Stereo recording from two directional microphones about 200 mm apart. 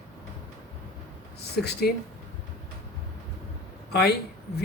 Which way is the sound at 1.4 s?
55° left (ahead or behind).